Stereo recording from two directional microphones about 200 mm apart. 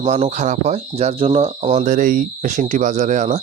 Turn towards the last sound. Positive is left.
turn(degrees=-35)  # may be behind; listen again after turning